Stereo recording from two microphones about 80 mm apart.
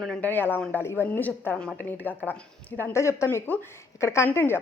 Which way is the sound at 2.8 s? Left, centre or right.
Left.